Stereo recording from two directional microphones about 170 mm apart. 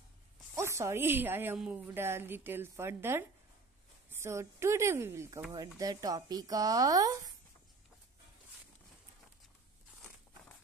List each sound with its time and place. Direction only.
0.6 s a woman's voice: 15° right (ahead or behind)